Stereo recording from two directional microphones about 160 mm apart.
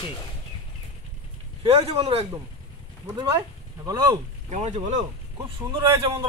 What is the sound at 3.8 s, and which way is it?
Speech, 25° right (ahead or behind).